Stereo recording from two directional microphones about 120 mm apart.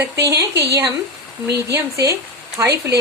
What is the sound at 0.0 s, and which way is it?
Speech, 25° right (ahead or behind).